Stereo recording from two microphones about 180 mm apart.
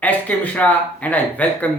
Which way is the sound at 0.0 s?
10° left (ahead or behind).